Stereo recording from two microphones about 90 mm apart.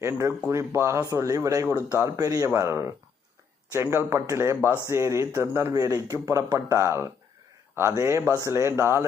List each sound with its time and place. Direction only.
0.2 s speech: 30° right (ahead or behind)